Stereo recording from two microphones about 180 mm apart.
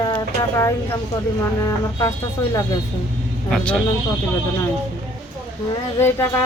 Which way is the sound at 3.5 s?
5° left (ahead or behind).